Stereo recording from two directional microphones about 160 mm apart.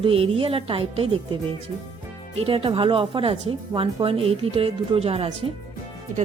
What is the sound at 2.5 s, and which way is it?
A woman's voice, 35° right (ahead or behind).